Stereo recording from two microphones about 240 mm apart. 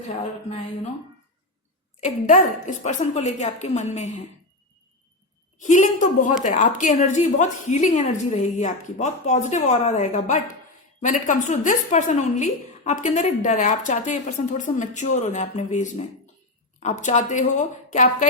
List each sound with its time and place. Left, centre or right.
2.0 s a woman's voice: left
5.5 s a woman's voice: left